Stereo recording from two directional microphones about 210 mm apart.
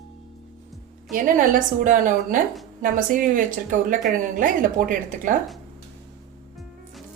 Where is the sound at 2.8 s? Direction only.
40° right (ahead or behind).